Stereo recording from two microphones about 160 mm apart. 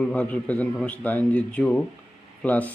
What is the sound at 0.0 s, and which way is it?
A man's voice, 10° left (ahead or behind).